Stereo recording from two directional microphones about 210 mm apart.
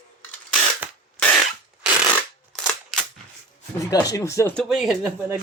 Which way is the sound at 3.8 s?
15° left (ahead or behind).